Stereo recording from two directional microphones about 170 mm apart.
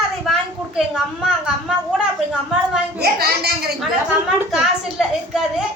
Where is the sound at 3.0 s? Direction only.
65° right (ahead or behind).